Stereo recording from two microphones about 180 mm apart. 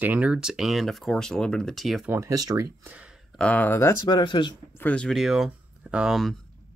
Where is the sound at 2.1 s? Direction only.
20° right (ahead or behind); by 3.9 s 10° left (ahead or behind).